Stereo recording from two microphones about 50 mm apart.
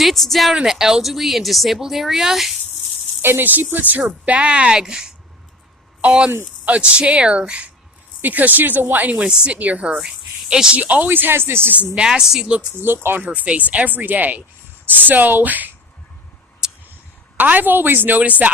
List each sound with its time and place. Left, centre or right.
0.0 s speech: centre
0.5 s speech: centre
3.2 s speech: right
4.3 s speech: right
8.2 s speech: right
9.0 s speech: right
9.3 s speech: centre
9.6 s speech: right
10.8 s speech: right
11.9 s speech: centre
12.8 s speech: right
13.2 s speech: right
17.3 s speech: right